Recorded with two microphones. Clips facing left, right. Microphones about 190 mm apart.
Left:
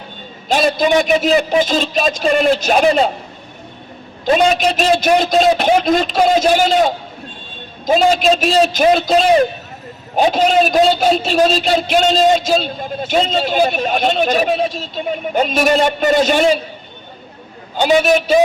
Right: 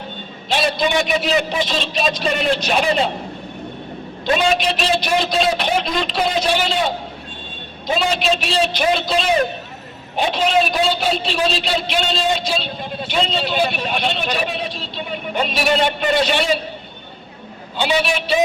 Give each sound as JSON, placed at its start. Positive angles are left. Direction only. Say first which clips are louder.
{"t": 0.4, "sound": "a man's voice", "louder": "left 5 dB", "side_deg": 45}
{"t": 4.5, "sound": "a man's voice", "louder": "left 4 dB", "side_deg": 45}
{"t": 7.9, "sound": "a man's voice", "louder": "left 6 dB", "side_deg": 45}
{"t": 17.7, "sound": "a man's voice", "louder": "left 7 dB", "side_deg": 45}